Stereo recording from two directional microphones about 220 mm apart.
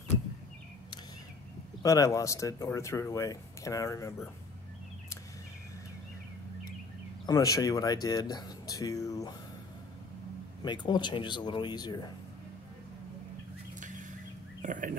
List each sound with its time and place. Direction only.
1.8 s speech: 15° left (ahead or behind)
7.2 s speech: 15° left (ahead or behind)
10.6 s speech: 20° left (ahead or behind)
13.7 s a sound: 35° right (ahead or behind)